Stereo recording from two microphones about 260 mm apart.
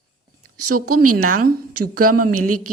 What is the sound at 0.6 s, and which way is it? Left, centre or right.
Speech, right.